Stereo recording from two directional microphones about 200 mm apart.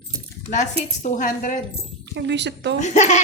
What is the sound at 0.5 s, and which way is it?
Speech, 40° left (ahead or behind).